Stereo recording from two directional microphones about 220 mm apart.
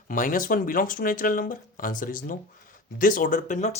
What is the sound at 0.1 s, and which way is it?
Speech, 40° left (ahead or behind).